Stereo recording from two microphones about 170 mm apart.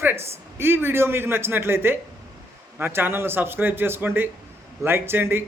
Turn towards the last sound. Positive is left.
turn(degrees=-15)  # may be behind; listen again after turning